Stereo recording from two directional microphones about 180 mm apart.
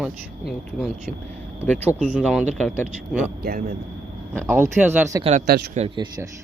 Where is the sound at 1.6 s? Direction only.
10° left (ahead or behind).